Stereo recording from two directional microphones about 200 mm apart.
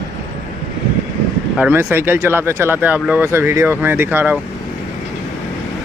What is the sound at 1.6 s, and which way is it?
Speech, 10° right (ahead or behind).